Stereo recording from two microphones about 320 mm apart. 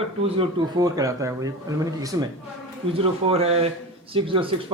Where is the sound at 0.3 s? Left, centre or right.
Centre.